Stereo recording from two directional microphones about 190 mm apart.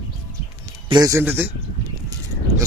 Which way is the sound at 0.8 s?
20° right (ahead or behind).